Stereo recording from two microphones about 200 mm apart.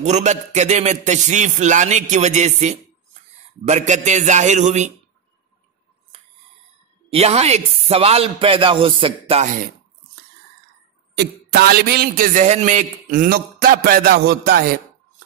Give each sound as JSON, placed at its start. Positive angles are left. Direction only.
{"t": 0.0, "sound": "a man's voice", "side_deg": -35}
{"t": 7.1, "sound": "speech", "side_deg": -30}
{"t": 11.1, "sound": "a man's voice", "side_deg": -50}